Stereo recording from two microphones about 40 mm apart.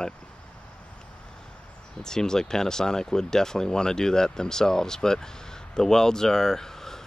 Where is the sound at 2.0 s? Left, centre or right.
Centre.